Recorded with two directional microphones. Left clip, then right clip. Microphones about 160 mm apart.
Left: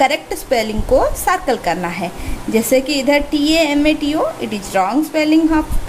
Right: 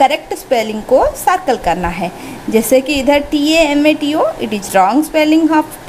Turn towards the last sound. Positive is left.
turn(degrees=-20)  # may be behind; listen again after turning